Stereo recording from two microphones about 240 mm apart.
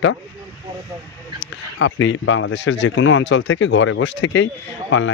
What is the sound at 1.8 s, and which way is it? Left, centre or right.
Speech, left.